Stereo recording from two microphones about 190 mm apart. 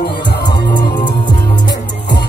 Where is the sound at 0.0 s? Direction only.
60° left (ahead or behind).